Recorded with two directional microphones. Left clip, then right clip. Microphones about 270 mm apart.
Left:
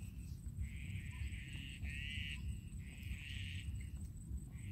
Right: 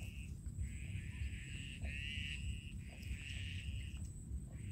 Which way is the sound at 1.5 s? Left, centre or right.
Left.